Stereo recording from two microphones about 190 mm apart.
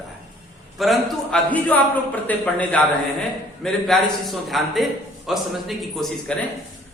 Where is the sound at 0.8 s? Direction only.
Centre (ahead or behind).